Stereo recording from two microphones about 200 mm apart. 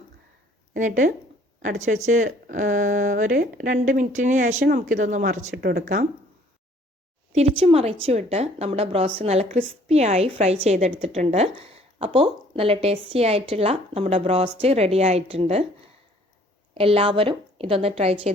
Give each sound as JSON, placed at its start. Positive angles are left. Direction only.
{"t": 0.7, "sound": "speech", "side_deg": -40}
{"t": 5.5, "sound": "speech", "side_deg": -50}
{"t": 7.3, "sound": "a woman's voice", "side_deg": -30}
{"t": 16.7, "sound": "a woman's voice", "side_deg": -30}